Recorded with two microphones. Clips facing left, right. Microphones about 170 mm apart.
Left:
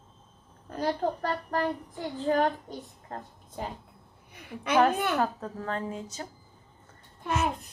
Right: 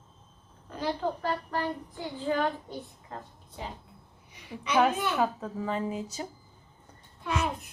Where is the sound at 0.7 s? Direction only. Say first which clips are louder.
Left 2 dB; 45° left (ahead or behind).